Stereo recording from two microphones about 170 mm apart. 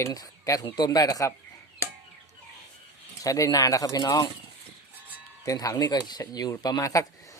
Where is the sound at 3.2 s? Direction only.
20° left (ahead or behind).